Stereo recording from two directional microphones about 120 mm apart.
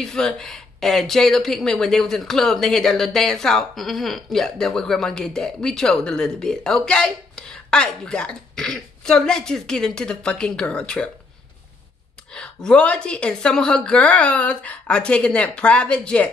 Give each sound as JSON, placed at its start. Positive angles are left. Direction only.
{"t": 0.0, "sound": "speech", "side_deg": 5}
{"t": 12.3, "sound": "a woman's voice", "side_deg": 5}